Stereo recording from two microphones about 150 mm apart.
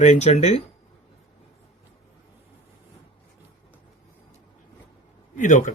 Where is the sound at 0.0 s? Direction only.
50° left (ahead or behind).